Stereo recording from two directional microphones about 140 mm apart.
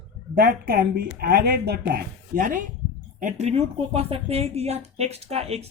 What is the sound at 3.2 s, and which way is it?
Speech, 60° right (ahead or behind).